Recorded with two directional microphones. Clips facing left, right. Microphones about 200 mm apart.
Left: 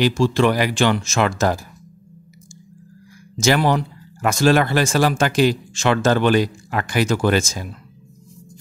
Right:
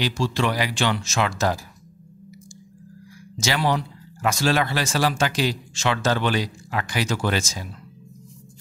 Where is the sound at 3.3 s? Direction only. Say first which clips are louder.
Left 6 dB; 50° left (ahead or behind).